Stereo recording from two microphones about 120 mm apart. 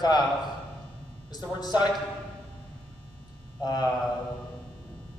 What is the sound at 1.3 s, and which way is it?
Speech, 35° left (ahead or behind).